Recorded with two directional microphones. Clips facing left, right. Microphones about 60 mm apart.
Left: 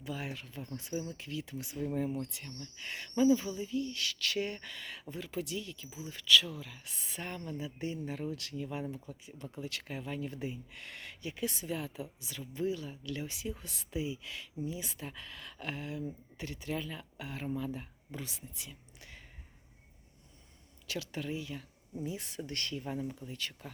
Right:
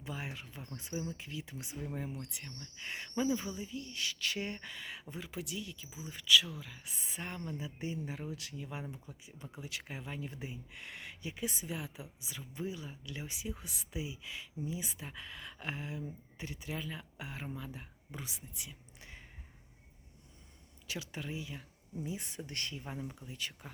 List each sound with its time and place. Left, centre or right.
0.0 s speech: centre
6.8 s speech: centre
18.9 s a sound: right
20.8 s speech: centre